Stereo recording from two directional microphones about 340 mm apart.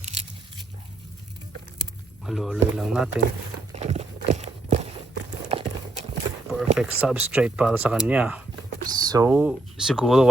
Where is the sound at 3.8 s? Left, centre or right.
Centre.